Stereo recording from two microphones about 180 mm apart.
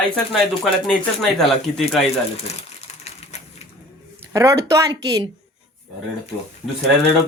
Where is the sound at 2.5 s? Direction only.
35° left (ahead or behind).